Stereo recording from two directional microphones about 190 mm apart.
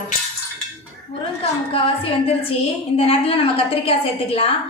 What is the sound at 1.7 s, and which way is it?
A woman's voice, 30° left (ahead or behind).